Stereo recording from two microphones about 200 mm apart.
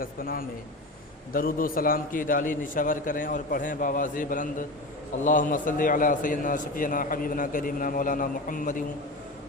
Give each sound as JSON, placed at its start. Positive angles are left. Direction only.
{"t": 0.0, "sound": "a man's voice", "side_deg": 45}